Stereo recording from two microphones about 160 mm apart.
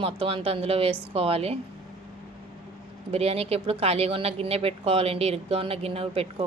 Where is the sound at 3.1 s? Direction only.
40° right (ahead or behind).